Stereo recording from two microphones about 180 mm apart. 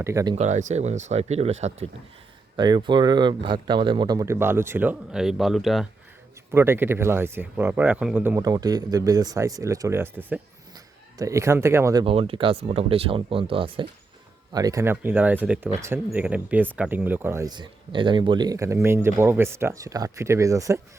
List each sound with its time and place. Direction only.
0.0 s speech: 15° right (ahead or behind)
0.3 s speech: 40° right (ahead or behind)
2.6 s speech: 25° right (ahead or behind); by 5.9 s centre (ahead or behind)
6.5 s speech: 15° right (ahead or behind)
8.4 s speech: 20° right (ahead or behind)
12.0 s speech: 30° right (ahead or behind)
14.5 s speech: 20° right (ahead or behind)